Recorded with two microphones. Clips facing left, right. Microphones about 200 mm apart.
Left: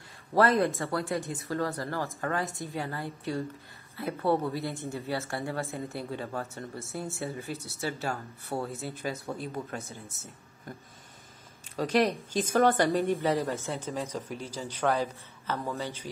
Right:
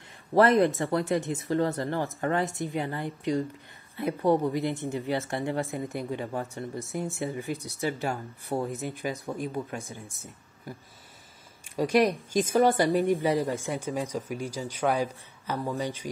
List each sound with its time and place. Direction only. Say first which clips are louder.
0.3 s speech: right 4 dB; 20° right (ahead or behind)
11.7 s speech: right 3 dB; 10° right (ahead or behind)